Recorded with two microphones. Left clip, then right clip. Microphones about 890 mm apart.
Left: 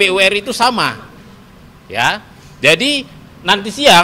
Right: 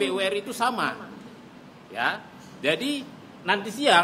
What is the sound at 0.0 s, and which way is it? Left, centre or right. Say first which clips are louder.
A man's voice: left 14 dB; left.